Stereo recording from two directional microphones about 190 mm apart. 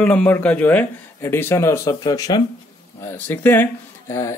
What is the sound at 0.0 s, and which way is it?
Speech, 5° left (ahead or behind).